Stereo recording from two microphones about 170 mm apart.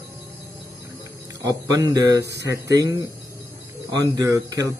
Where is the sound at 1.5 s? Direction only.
25° right (ahead or behind).